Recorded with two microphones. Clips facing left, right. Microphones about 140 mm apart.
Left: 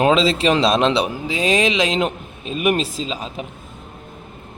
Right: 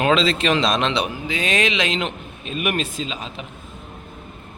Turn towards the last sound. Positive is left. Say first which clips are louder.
# left 3 dB
turn(degrees=40)  # may be behind; listen again after turning